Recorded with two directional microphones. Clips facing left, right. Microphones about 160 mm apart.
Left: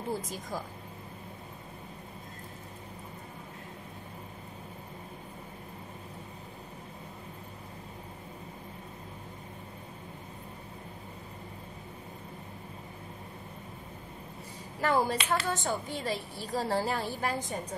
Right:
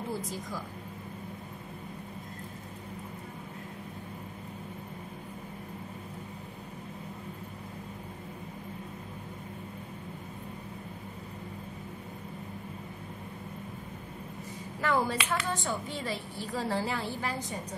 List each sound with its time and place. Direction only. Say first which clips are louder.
14.8 s a woman's voice: left 1 dB; 40° left (ahead or behind)